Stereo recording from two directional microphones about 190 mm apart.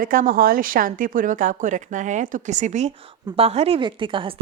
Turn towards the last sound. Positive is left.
turn(degrees=-25)  # may be behind; listen again after turning